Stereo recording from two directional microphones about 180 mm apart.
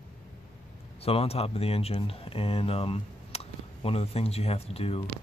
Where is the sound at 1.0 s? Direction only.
35° left (ahead or behind).